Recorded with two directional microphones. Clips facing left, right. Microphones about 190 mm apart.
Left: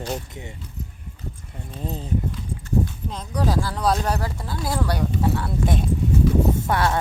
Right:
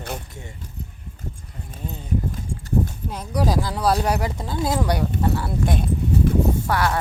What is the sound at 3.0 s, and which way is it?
Speech, 10° right (ahead or behind).